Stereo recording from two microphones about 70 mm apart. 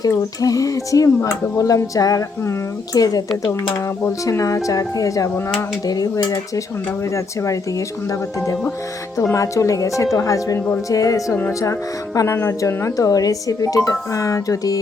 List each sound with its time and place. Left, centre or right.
0.0 s speech: left
5.8 s speech: left
7.1 s speech: left
9.3 s speech: left